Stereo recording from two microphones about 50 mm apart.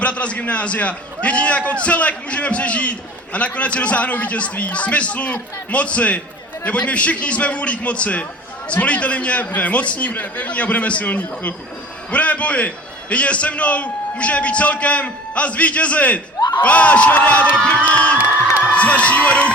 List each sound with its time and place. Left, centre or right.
0.0 s a man's voice: left